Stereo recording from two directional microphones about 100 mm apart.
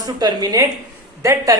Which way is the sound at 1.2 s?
30° right (ahead or behind).